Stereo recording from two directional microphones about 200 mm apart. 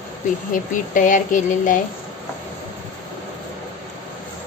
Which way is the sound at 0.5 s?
40° left (ahead or behind).